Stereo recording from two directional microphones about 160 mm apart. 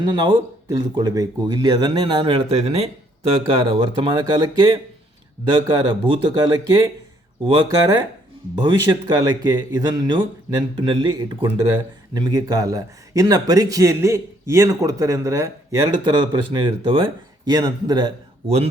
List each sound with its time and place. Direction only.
0.0 s speech: 25° right (ahead or behind)
8.5 s speech: 30° right (ahead or behind)